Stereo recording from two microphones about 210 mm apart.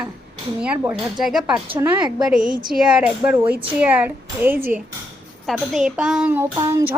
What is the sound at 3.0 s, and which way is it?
Speech, 5° right (ahead or behind).